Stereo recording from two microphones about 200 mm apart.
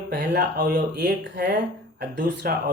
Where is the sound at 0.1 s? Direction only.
55° right (ahead or behind).